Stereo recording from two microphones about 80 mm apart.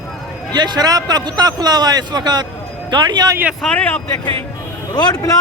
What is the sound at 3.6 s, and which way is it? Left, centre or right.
Speech, centre.